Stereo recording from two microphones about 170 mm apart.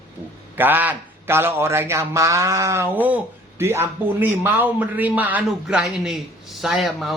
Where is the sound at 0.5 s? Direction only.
10° right (ahead or behind).